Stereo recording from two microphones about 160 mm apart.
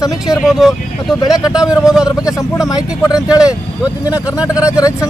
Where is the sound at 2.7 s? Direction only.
20° left (ahead or behind).